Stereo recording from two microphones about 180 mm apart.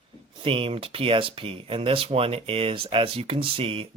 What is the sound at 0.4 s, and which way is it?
Speech, 30° right (ahead or behind).